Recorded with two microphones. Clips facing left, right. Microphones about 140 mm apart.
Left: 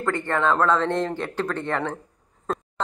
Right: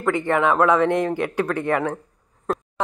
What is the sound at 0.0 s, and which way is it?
Speech, 15° right (ahead or behind).